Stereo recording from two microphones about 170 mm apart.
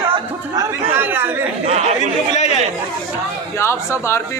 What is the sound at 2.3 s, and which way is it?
Chatter, 40° left (ahead or behind).